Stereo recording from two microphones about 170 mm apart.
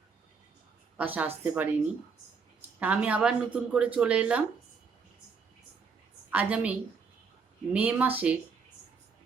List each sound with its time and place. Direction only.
0.9 s speech: 10° right (ahead or behind)
2.7 s speech: 10° right (ahead or behind)
6.3 s speech: 5° right (ahead or behind)